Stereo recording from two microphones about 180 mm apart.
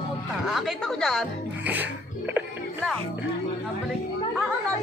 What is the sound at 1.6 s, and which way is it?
Speech, 10° right (ahead or behind).